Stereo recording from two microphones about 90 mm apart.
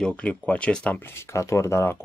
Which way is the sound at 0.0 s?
10° left (ahead or behind).